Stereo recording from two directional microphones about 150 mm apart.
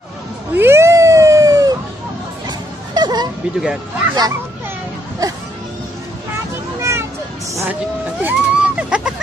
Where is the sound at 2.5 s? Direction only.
30° right (ahead or behind).